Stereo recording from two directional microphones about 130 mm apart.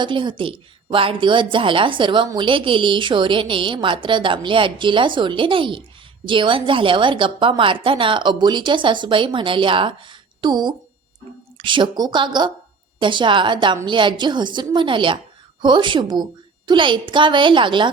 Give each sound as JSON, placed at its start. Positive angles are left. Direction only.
{"t": 0.0, "sound": "a woman's voice", "side_deg": -35}